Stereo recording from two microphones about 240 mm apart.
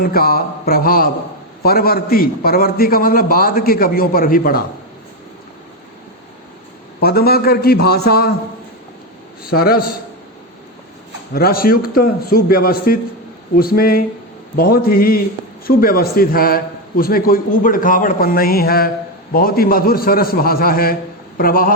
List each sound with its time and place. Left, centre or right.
0.0 s a man's voice: left
7.0 s a man's voice: left
9.6 s a man's voice: left
11.3 s a man's voice: left